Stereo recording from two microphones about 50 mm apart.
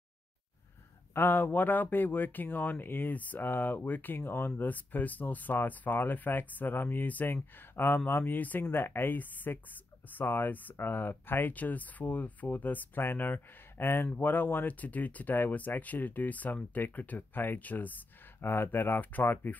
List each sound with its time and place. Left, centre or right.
1.1 s speech: left
8.7 s speech: left
18.4 s speech: left